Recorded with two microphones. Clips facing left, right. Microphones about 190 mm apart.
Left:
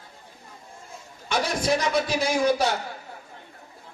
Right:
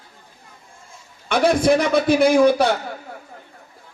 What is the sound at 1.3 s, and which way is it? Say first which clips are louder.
A man's voice: right 8 dB; 60° right (ahead or behind).